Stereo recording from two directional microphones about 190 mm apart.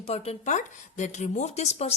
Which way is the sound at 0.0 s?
30° left (ahead or behind).